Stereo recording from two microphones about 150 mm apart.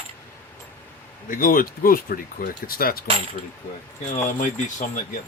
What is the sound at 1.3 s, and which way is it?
Speech, 65° left (ahead or behind).